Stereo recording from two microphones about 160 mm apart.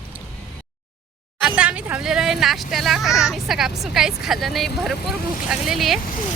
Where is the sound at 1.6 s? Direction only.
10° right (ahead or behind).